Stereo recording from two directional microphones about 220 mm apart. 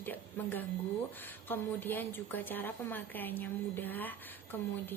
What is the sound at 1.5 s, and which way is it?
A woman's voice, 10° left (ahead or behind).